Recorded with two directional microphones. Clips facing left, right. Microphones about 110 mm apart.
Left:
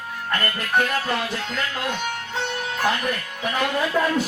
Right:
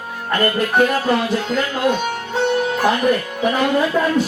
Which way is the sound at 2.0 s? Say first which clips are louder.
Right 8 dB; 40° right (ahead or behind).